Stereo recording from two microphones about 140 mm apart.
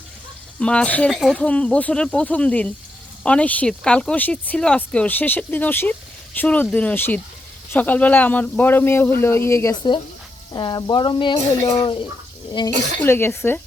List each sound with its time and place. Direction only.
0.6 s speech: 5° left (ahead or behind)
10.5 s speech: 30° left (ahead or behind)
12.5 s speech: 35° left (ahead or behind)
13.0 s speech: 15° left (ahead or behind)